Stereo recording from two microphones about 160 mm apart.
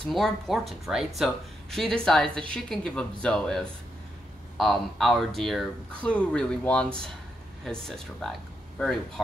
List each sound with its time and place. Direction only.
0.1 s speech: centre (ahead or behind)